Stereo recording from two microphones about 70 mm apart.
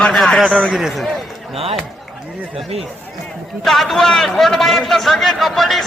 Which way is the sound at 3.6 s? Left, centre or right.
Centre.